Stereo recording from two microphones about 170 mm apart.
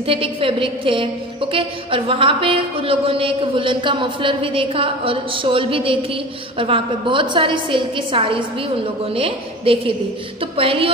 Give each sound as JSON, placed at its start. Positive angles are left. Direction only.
{"t": 0.0, "sound": "a woman's voice", "side_deg": -35}